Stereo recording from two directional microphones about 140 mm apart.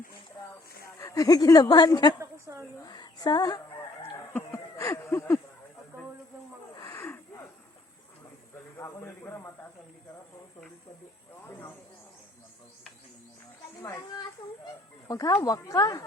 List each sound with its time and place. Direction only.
0.9 s a woman's voice: 25° left (ahead or behind)
2.8 s a sound: 30° left (ahead or behind)
4.3 s a sound: 20° left (ahead or behind)
6.9 s snort: 15° left (ahead or behind)
8.8 s a woman's voice: 20° left (ahead or behind)
14.6 s a woman's voice: 25° left (ahead or behind)